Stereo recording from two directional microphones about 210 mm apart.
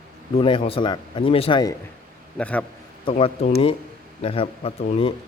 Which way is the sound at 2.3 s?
5° left (ahead or behind).